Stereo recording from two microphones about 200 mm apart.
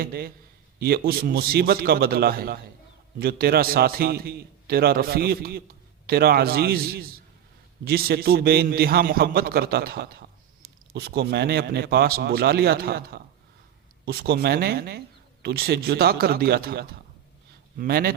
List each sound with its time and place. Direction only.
0.0 s a man's voice: 50° right (ahead or behind)